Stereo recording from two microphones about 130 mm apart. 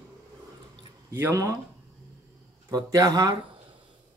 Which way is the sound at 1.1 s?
20° right (ahead or behind).